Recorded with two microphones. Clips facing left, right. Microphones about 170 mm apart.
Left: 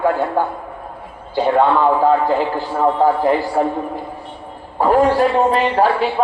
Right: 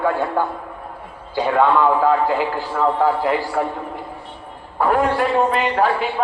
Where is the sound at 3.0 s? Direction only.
30° left (ahead or behind).